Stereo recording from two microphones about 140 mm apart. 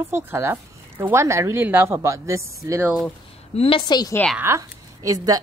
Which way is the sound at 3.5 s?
40° left (ahead or behind).